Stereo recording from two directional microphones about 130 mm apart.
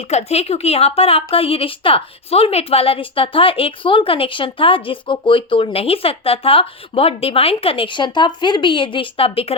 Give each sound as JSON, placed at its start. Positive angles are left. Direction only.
{"t": 0.1, "sound": "a woman's voice", "side_deg": 55}